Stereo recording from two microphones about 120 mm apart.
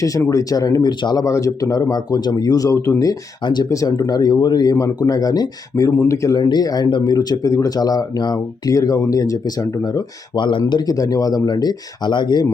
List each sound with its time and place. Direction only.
0.0 s speech: 30° left (ahead or behind)